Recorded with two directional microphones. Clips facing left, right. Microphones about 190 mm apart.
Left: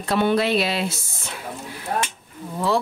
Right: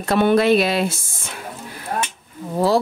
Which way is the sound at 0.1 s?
50° right (ahead or behind).